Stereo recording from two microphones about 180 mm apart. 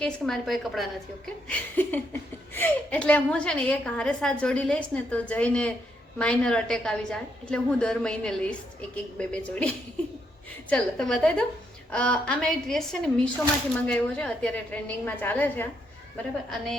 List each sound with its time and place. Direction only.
0.0 s a woman's voice: centre (ahead or behind)